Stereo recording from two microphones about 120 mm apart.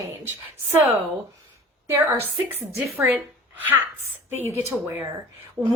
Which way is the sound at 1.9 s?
20° right (ahead or behind).